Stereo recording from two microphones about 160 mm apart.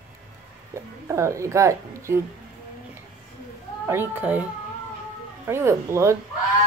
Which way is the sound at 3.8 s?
15° right (ahead or behind).